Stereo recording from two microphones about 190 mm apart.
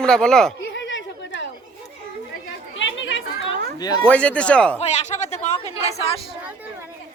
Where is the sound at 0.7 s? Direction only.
70° left (ahead or behind).